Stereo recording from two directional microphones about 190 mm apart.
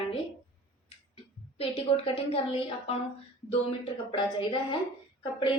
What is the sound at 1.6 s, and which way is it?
A woman's voice, 30° left (ahead or behind).